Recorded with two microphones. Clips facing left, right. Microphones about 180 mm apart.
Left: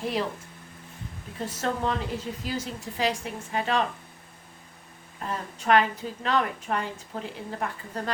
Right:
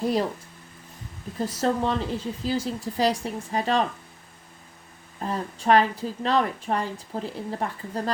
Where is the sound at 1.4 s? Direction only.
35° right (ahead or behind).